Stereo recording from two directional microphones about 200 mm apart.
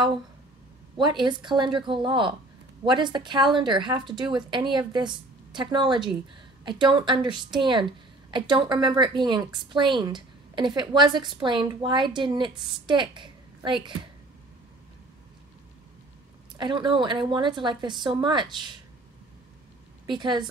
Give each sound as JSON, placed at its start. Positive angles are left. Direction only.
{"t": 0.9, "sound": "a woman's voice", "side_deg": -25}
{"t": 16.5, "sound": "a woman's voice", "side_deg": -25}
{"t": 20.1, "sound": "a woman's voice", "side_deg": -25}